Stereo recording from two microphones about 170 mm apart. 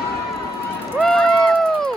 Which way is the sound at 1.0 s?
5° left (ahead or behind).